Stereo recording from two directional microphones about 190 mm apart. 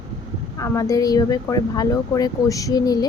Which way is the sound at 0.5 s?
15° left (ahead or behind).